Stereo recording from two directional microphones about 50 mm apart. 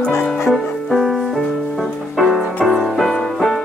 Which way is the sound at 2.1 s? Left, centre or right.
Centre.